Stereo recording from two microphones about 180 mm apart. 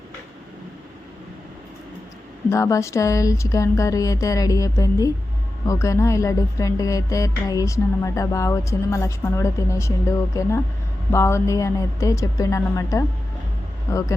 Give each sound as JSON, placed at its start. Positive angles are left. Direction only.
{"t": 2.5, "sound": "speech", "side_deg": 15}